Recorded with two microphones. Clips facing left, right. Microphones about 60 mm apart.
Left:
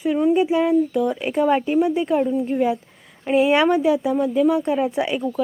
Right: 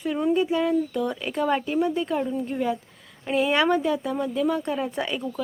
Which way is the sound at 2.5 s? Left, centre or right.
Centre.